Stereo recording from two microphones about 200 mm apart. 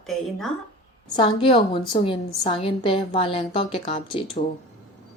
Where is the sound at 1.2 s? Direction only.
25° left (ahead or behind).